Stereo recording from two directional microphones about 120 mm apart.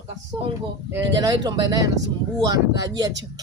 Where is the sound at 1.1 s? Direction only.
35° right (ahead or behind).